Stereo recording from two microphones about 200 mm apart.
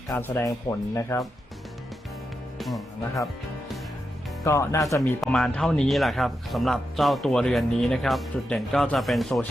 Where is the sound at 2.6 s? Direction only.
Centre (ahead or behind).